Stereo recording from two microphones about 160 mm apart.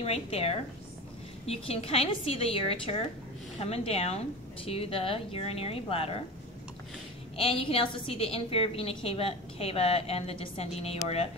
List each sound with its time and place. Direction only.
0.0 s a woman's voice: 40° left (ahead or behind)
7.3 s a woman's voice: 35° left (ahead or behind)